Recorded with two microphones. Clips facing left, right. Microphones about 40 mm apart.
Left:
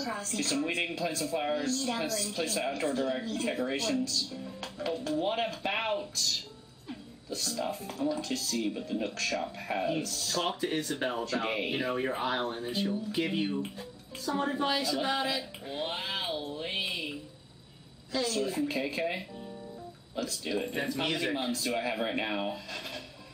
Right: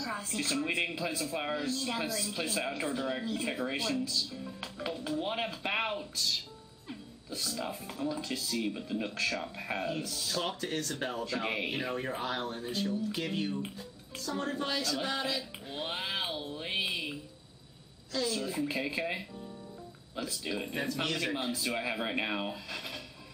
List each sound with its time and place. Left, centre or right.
0.0 s speech: centre
6.9 s music: centre
7.5 s speech: centre
9.8 s speech: centre
10.0 s speech: centre
10.4 s speech: centre
11.3 s speech: centre
11.7 s speech: centre
18.1 s speech: centre
18.5 s speech: centre
20.2 s speech: centre
20.5 s speech: centre
21.5 s speech: centre